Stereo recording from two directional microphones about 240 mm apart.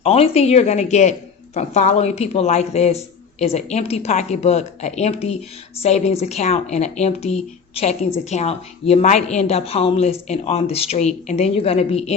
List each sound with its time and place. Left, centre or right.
0.0 s a woman's voice: left